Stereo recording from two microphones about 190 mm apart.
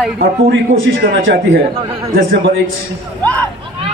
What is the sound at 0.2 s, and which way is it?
A man's voice, 70° right (ahead or behind).